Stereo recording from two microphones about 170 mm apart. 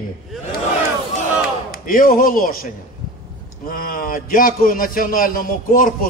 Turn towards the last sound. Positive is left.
turn(degrees=55)  # may be behind; listen again after turning